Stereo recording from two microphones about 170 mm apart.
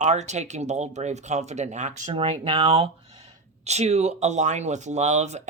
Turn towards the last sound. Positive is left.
turn(degrees=-40)  # may be behind; listen again after turning